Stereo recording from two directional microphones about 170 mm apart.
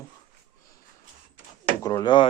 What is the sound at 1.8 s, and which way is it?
Speech, 25° left (ahead or behind).